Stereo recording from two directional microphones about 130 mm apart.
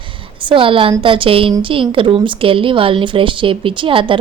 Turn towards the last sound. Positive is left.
turn(degrees=-40)  # may be behind; listen again after turning